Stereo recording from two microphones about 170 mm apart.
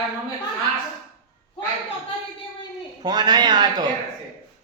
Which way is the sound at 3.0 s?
25° right (ahead or behind).